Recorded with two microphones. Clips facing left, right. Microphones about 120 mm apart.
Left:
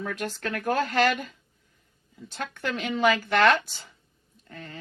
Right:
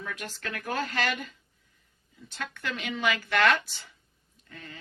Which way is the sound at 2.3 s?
45° left (ahead or behind).